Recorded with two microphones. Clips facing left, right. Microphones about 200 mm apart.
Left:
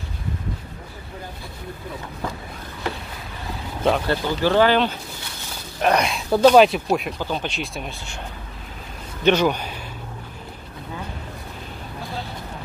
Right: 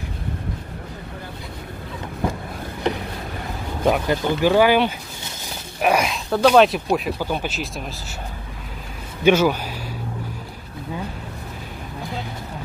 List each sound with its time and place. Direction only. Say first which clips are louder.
3.8 s speech: right 1 dB; 15° right (ahead or behind)
9.2 s speech: right 2 dB; 10° right (ahead or behind)